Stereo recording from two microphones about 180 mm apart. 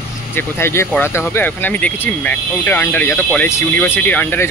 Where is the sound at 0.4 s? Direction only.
15° left (ahead or behind).